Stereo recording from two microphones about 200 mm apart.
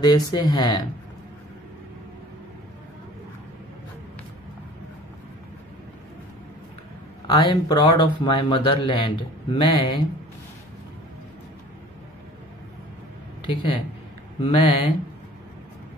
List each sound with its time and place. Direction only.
0.0 s speech: 20° left (ahead or behind)
7.2 s speech: 20° left (ahead or behind)
13.5 s speech: 25° left (ahead or behind)